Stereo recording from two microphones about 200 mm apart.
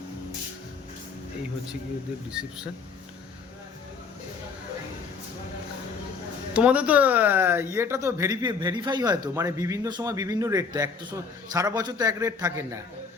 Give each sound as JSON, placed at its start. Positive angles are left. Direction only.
{"t": 2.3, "sound": "speech", "side_deg": -5}
{"t": 6.5, "sound": "speech", "side_deg": -5}